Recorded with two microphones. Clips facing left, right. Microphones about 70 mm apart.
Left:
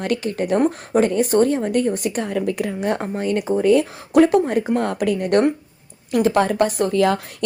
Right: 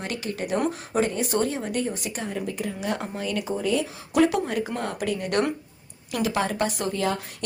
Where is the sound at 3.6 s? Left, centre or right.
Left.